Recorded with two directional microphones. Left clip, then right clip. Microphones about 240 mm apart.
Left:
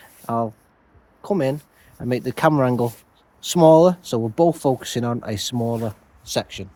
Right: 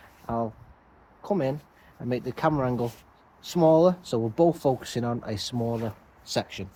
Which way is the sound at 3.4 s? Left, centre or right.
Left.